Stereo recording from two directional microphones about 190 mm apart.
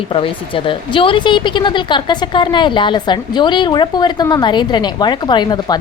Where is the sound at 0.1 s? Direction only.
25° left (ahead or behind).